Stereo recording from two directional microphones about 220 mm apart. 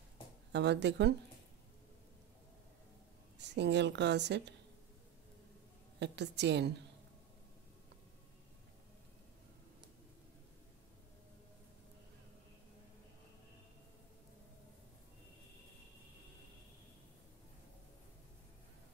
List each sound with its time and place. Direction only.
0.5 s a woman's voice: 50° right (ahead or behind)
3.3 s a woman's voice: 50° right (ahead or behind)
5.9 s a woman's voice: 50° right (ahead or behind)